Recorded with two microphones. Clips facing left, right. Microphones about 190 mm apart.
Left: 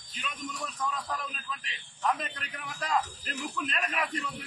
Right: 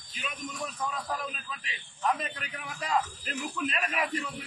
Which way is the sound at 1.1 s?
5° right (ahead or behind).